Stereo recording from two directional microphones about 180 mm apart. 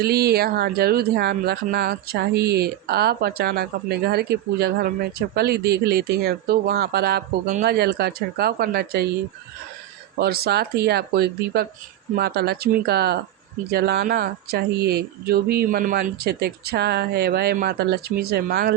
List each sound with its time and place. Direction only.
0.0 s speech: 60° right (ahead or behind)
10.2 s speech: 60° right (ahead or behind)